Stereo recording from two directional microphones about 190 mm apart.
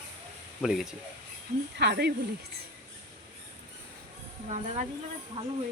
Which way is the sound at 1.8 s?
60° right (ahead or behind).